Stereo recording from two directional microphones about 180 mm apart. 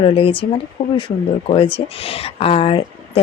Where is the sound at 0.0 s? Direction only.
30° left (ahead or behind).